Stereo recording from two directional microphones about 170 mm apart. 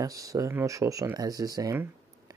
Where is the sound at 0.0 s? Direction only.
20° right (ahead or behind).